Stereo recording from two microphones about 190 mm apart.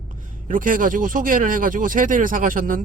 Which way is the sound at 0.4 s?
45° right (ahead or behind).